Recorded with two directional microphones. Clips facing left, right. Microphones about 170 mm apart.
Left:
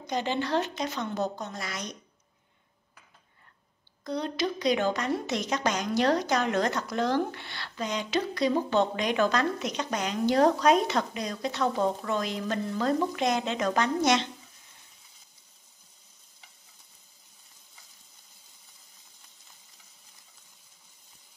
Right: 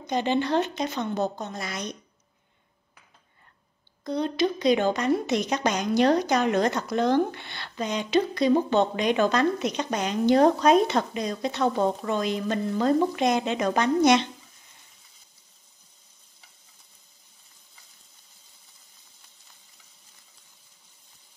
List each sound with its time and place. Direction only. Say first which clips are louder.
0.0 s a woman's voice: right 5 dB; 20° right (ahead or behind)
4.0 s a woman's voice: right 5 dB; 25° right (ahead or behind)